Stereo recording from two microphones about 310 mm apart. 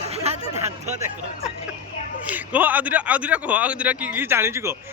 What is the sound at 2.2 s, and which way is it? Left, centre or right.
A man's voice, centre.